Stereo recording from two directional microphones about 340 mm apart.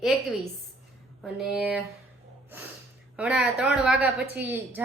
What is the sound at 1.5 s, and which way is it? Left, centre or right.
Speech, centre.